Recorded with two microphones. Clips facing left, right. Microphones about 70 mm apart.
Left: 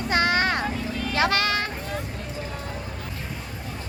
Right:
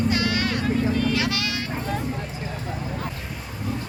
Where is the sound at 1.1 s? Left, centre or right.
Left.